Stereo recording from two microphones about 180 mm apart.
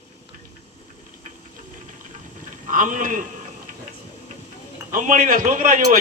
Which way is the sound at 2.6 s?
45° right (ahead or behind).